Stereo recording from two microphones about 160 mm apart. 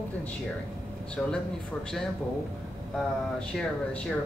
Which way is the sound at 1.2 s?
10° left (ahead or behind).